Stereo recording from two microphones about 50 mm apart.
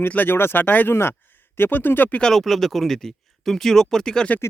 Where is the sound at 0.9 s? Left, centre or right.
Left.